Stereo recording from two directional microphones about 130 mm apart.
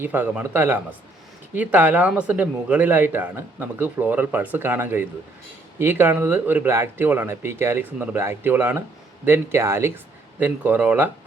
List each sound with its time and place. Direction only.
0.0 s a man's voice: 15° right (ahead or behind)